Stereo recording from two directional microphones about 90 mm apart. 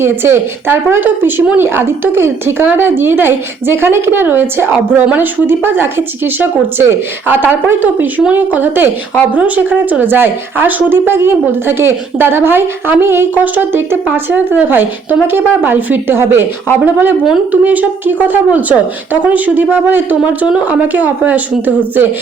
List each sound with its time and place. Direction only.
0.0 s a woman's voice: 25° right (ahead or behind)